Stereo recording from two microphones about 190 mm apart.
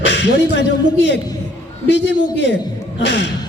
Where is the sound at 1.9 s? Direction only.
65° left (ahead or behind).